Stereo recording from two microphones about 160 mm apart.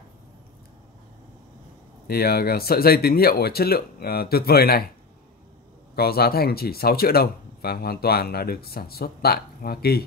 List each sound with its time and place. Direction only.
2.0 s speech: 70° left (ahead or behind)
5.9 s speech: 75° left (ahead or behind)